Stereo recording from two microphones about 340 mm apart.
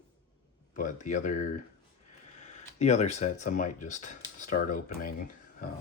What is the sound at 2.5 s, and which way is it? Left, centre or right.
Speech, centre.